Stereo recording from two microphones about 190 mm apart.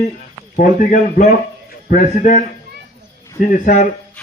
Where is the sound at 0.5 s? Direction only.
45° left (ahead or behind).